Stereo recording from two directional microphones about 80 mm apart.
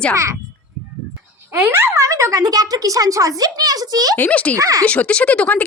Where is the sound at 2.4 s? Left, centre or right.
Right.